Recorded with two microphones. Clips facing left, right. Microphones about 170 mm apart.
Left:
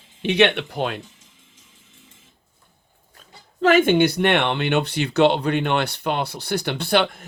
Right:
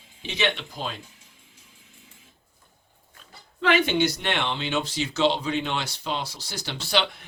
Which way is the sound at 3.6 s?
45° left (ahead or behind).